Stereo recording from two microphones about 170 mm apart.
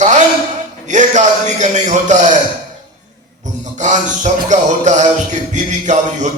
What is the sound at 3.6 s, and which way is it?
Music, 45° right (ahead or behind).